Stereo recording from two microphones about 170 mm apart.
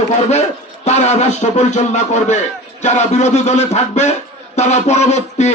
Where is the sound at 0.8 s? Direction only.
40° left (ahead or behind).